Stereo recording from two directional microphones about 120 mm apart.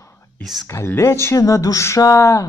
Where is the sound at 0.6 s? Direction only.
20° left (ahead or behind).